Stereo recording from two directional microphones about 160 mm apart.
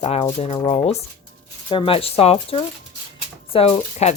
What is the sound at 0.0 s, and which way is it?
A woman's voice, 40° left (ahead or behind).